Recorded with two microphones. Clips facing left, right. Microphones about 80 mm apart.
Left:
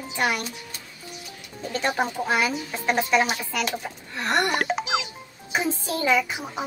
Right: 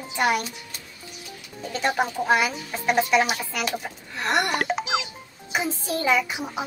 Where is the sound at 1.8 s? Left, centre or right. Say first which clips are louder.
Right 3 dB; centre.